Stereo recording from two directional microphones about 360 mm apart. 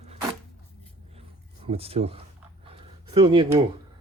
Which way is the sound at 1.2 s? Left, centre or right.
Centre.